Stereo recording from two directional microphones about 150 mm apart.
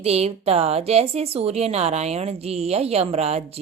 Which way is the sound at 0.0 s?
45° right (ahead or behind).